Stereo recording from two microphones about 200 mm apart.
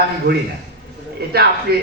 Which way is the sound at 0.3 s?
60° right (ahead or behind).